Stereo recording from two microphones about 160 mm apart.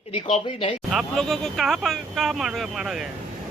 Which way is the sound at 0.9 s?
Centre (ahead or behind).